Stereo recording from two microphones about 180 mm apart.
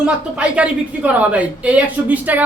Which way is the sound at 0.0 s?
5° right (ahead or behind).